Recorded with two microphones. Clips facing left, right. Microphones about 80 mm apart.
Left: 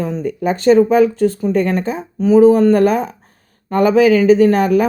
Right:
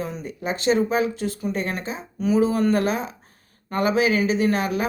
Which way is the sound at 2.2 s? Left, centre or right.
Left.